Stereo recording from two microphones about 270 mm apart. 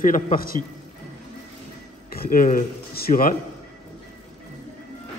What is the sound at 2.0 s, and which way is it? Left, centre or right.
Speech, left.